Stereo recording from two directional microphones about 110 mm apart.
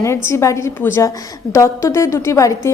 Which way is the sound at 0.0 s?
25° left (ahead or behind).